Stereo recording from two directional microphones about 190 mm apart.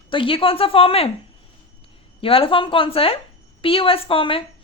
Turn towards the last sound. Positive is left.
turn(degrees=30)  # may be behind; listen again after turning